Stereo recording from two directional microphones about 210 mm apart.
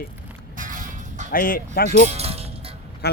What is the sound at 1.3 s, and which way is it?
Speech, 45° left (ahead or behind).